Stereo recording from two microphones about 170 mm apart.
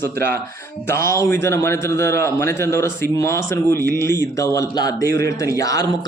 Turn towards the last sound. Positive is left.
turn(degrees=20)  # may be behind; listen again after turning